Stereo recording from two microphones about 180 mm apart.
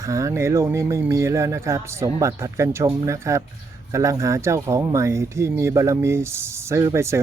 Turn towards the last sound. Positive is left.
turn(degrees=-15)  # may be behind; listen again after turning